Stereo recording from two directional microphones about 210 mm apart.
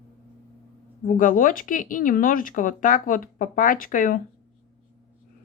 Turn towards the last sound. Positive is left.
turn(degrees=40)  # may be behind; listen again after turning